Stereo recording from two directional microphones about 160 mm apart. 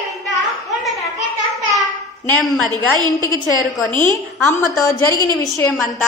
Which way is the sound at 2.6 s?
25° right (ahead or behind).